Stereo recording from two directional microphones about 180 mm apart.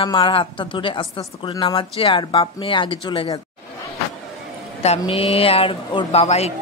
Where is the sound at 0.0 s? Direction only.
25° left (ahead or behind).